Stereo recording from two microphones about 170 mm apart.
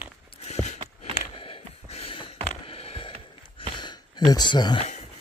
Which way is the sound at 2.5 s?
35° left (ahead or behind).